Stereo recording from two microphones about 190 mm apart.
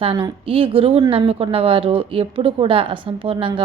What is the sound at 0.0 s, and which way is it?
A woman's voice, 30° right (ahead or behind).